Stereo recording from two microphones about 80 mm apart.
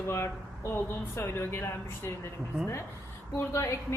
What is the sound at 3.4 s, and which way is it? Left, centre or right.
Speech, left.